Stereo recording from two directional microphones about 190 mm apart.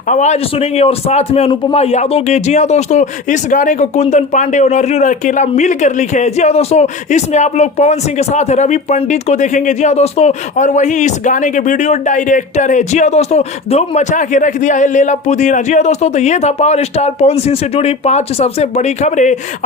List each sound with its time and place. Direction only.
0.1 s a man's voice: 40° left (ahead or behind)